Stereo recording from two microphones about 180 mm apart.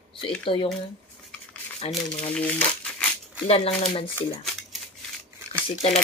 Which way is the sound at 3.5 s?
35° left (ahead or behind).